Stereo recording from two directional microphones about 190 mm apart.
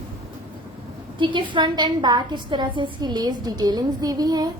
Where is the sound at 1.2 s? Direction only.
25° right (ahead or behind).